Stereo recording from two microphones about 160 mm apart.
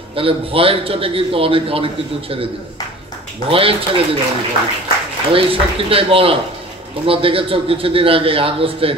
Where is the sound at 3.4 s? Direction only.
35° right (ahead or behind).